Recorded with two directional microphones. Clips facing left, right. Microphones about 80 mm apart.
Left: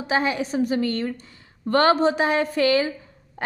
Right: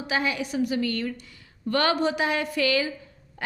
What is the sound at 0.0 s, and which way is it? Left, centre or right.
A woman's voice, left.